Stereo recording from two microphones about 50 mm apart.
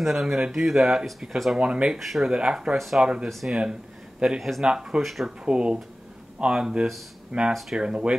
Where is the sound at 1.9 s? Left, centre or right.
Centre.